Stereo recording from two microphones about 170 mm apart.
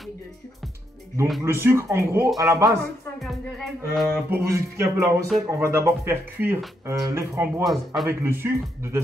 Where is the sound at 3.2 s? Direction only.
Centre (ahead or behind).